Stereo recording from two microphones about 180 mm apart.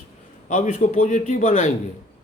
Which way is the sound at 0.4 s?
45° left (ahead or behind).